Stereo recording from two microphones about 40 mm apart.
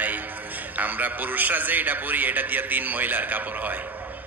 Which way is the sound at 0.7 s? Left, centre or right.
Right.